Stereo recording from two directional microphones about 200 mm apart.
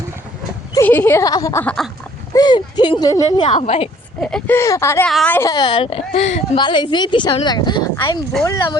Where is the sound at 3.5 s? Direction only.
30° left (ahead or behind).